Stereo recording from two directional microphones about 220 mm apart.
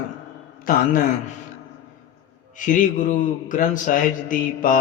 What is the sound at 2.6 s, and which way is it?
Mantra, 35° left (ahead or behind).